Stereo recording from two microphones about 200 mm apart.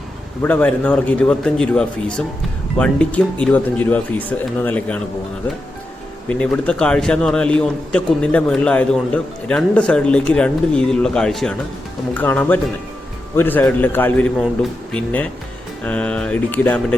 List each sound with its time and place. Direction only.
0.4 s a man's voice: 5° left (ahead or behind)
6.2 s a man's voice: 5° left (ahead or behind)